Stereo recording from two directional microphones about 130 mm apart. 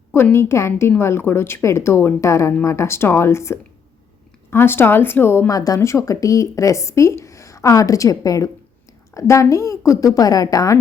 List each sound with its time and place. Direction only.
0.1 s speech: 20° left (ahead or behind)